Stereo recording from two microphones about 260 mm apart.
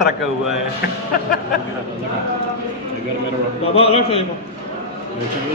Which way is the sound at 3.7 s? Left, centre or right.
Left.